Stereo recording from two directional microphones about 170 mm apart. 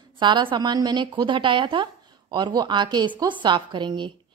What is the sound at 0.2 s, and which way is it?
A woman's voice, 30° right (ahead or behind).